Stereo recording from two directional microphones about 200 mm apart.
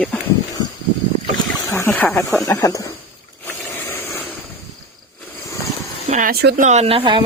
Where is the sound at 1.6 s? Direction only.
15° left (ahead or behind).